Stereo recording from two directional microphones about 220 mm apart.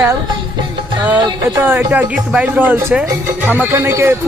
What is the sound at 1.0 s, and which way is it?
Music, 5° right (ahead or behind).